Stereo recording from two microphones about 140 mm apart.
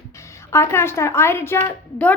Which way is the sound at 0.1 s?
20° left (ahead or behind).